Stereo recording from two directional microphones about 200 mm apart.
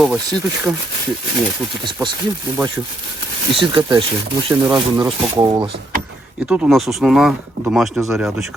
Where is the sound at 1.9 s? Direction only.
20° right (ahead or behind).